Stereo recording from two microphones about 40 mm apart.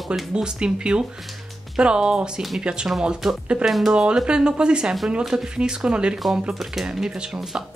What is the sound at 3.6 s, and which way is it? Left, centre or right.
Speech, centre.